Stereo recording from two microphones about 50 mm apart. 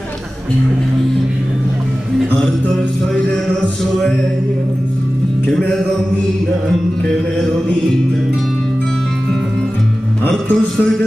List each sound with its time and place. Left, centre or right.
10.2 s music: centre